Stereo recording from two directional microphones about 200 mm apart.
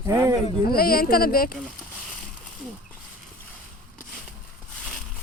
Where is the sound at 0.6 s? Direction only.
50° left (ahead or behind).